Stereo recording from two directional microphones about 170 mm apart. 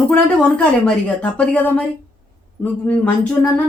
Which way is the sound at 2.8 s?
10° left (ahead or behind).